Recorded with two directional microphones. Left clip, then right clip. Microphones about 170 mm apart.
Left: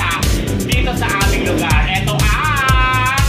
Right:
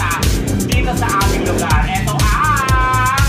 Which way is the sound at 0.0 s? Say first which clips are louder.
Even; centre (ahead or behind).